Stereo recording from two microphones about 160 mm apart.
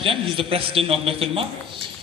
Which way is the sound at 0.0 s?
35° right (ahead or behind).